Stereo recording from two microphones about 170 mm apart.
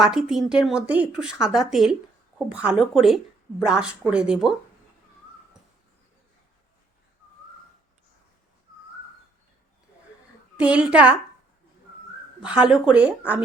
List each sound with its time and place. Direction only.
0.0 s speech: 5° right (ahead or behind)
10.6 s speech: 5° right (ahead or behind)
12.4 s speech: 5° right (ahead or behind)